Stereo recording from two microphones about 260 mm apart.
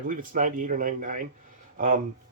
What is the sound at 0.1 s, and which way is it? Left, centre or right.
Speech, right.